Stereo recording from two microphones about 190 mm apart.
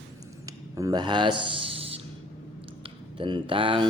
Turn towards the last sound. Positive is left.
turn(degrees=-25)  # may be behind; listen again after turning